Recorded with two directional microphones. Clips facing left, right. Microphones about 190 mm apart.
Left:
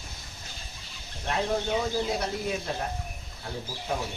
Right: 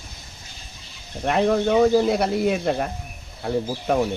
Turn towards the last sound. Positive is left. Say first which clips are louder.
# right 11 dB
turn(degrees=-70)  # may be behind; listen again after turning